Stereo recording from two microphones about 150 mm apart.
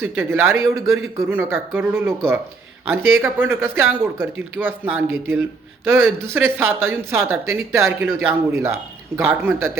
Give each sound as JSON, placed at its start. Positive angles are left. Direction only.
{"t": 0.0, "sound": "speech", "side_deg": -15}